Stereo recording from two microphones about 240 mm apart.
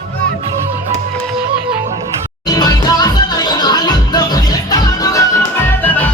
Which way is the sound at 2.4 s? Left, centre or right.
Centre.